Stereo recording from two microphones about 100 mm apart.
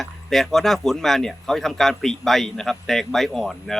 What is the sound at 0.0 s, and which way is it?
Speech, 5° left (ahead or behind).